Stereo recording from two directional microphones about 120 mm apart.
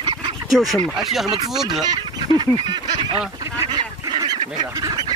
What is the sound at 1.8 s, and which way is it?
Goose, 35° right (ahead or behind).